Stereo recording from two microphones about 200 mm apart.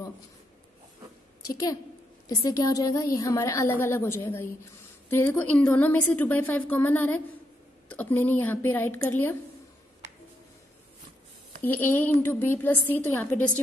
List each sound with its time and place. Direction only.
1.5 s a woman's voice: 20° left (ahead or behind)
11.6 s a woman's voice: 10° left (ahead or behind)